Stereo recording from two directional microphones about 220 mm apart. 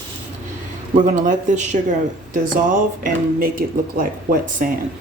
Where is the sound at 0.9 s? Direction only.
35° right (ahead or behind).